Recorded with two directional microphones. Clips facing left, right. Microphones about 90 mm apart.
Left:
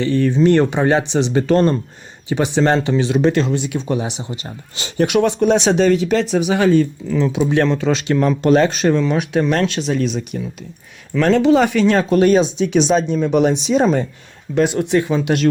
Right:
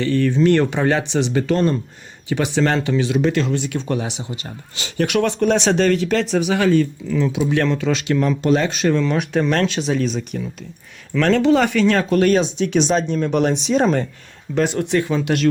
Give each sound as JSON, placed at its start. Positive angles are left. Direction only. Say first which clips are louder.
{"t": 0.0, "sound": "speech", "louder": "left 2 dB", "side_deg": 20}
{"t": 1.5, "sound": "speech", "louder": "left 5 dB", "side_deg": 40}
{"t": 2.3, "sound": "speech", "louder": "left 3 dB", "side_deg": 25}
{"t": 3.6, "sound": "speech", "louder": "left 2 dB", "side_deg": 5}
{"t": 4.2, "sound": "speech", "louder": "left 2 dB", "side_deg": 30}
{"t": 6.4, "sound": "speech", "louder": "left 2 dB", "side_deg": 25}
{"t": 7.1, "sound": "speech", "louder": "left 2 dB", "side_deg": 35}
{"t": 8.9, "sound": "speech", "louder": "left 2 dB", "side_deg": 15}
{"t": 9.3, "sound": "speech", "louder": "left 1 dB", "side_deg": 5}
{"t": 14.8, "sound": "speech", "louder": "left 2 dB", "side_deg": 15}